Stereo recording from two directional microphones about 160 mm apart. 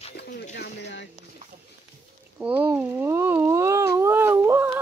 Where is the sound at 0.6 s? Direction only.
90° left.